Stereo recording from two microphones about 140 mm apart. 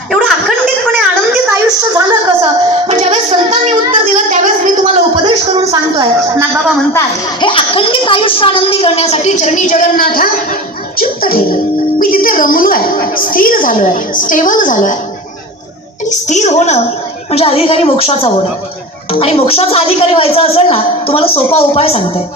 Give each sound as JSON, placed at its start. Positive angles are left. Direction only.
{"t": 1.6, "sound": "a sound", "side_deg": -30}
{"t": 2.8, "sound": "child singing", "side_deg": -55}
{"t": 5.2, "sound": "a sound", "side_deg": -30}
{"t": 7.4, "sound": "a woman's voice", "side_deg": 40}
{"t": 10.9, "sound": "music", "side_deg": 90}
{"t": 11.9, "sound": "a woman's voice", "side_deg": 90}
{"t": 16.0, "sound": "a woman's voice", "side_deg": 60}